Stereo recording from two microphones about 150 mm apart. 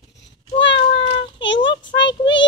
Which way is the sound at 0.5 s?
35° left (ahead or behind).